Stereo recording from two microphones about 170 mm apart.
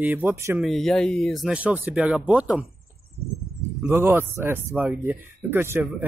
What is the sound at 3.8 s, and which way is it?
Speech, 15° right (ahead or behind).